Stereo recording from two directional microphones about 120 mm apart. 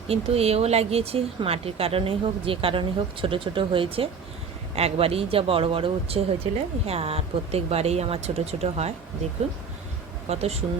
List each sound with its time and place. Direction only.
0.1 s speech: 60° right (ahead or behind)
10.2 s speech: 60° right (ahead or behind)